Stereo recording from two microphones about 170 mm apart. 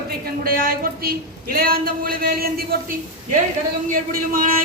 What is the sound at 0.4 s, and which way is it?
A man's voice, 60° right (ahead or behind).